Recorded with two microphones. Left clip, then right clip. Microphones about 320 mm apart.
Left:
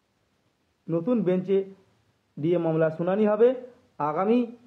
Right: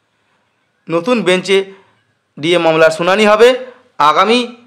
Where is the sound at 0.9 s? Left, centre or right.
Left.